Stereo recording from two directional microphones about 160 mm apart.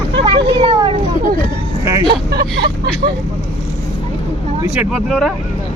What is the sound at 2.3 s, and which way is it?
Speech, 85° right.